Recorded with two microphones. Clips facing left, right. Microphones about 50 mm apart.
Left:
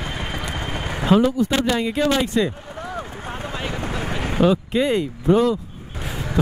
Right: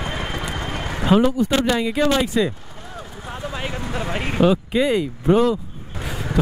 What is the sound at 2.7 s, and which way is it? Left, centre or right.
Vehicle, left.